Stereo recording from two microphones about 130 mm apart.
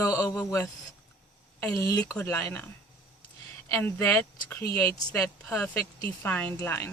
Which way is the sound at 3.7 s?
15° left (ahead or behind).